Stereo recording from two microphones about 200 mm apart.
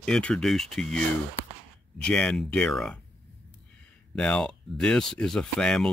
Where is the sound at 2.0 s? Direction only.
5° left (ahead or behind).